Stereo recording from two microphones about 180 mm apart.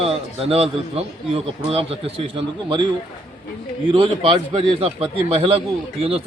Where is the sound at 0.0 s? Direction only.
35° right (ahead or behind).